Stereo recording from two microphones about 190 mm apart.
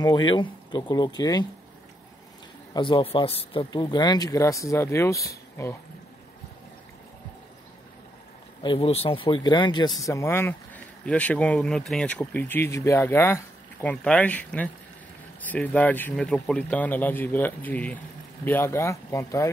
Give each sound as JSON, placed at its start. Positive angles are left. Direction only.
{"t": 0.0, "sound": "speech", "side_deg": 25}
{"t": 2.7, "sound": "speech", "side_deg": 25}
{"t": 8.6, "sound": "speech", "side_deg": 30}